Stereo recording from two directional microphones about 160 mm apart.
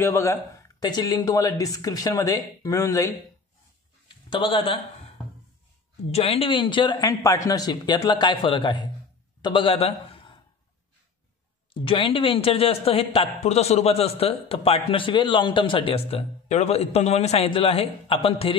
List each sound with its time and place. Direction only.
0.0 s speech: 15° left (ahead or behind)
4.3 s speech: 35° left (ahead or behind)
6.1 s a man's voice: 40° left (ahead or behind)
11.7 s speech: 30° left (ahead or behind)